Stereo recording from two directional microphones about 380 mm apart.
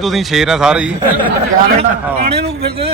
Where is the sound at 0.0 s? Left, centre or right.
Centre.